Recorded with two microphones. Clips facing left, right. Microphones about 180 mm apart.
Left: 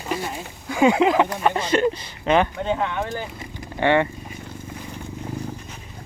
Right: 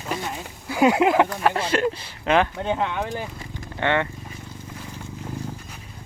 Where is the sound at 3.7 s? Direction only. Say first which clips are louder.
Left 4 dB; 10° left (ahead or behind).